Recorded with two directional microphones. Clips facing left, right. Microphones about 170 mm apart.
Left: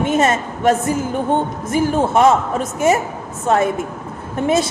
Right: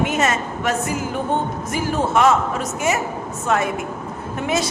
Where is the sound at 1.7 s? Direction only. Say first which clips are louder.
Left 5 dB; 30° left (ahead or behind).